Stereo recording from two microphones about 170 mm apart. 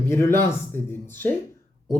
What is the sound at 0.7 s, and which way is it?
Speech, 50° right (ahead or behind).